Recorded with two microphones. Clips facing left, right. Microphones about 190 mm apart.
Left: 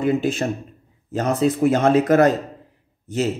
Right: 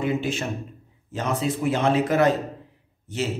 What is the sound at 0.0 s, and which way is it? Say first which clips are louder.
Speech: left 5 dB; 40° left (ahead or behind).